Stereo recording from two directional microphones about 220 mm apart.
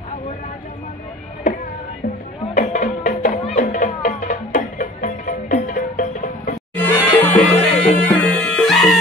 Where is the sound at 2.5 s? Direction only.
35° left (ahead or behind).